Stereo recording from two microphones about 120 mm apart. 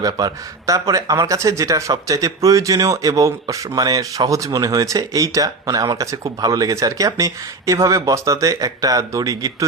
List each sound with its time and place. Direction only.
0.0 s speech: 30° right (ahead or behind)